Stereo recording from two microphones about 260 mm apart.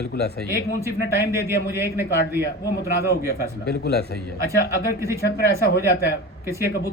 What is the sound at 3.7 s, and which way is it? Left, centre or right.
Speech, left.